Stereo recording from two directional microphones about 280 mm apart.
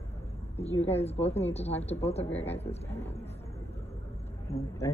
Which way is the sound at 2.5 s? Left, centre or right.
Left.